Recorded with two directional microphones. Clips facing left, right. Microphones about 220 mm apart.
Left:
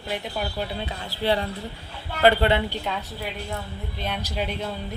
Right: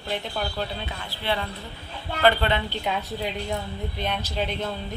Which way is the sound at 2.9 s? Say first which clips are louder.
Right 2 dB; 15° right (ahead or behind).